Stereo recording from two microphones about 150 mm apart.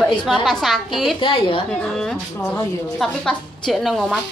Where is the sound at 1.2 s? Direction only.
35° left (ahead or behind).